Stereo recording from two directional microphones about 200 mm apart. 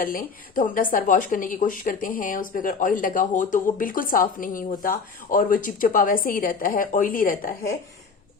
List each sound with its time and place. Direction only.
0.0 s a woman's voice: 45° left (ahead or behind)